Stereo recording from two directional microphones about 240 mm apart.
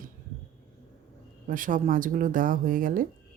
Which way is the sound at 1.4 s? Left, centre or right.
Right.